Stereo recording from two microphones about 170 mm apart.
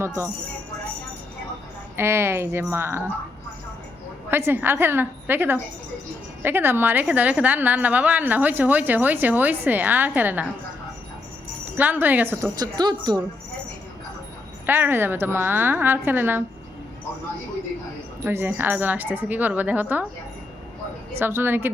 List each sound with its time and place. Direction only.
2.0 s a woman's voice: 15° right (ahead or behind)
4.3 s a woman's voice: 15° right (ahead or behind)
11.8 s a woman's voice: 10° right (ahead or behind)
12.5 s a woman's voice: 25° right (ahead or behind)
14.7 s a woman's voice: 10° right (ahead or behind)
18.2 s a woman's voice: 15° right (ahead or behind)
21.2 s a woman's voice: 15° right (ahead or behind)